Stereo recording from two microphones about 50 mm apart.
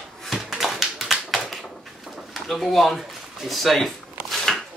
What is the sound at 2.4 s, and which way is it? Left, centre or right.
Speech, centre.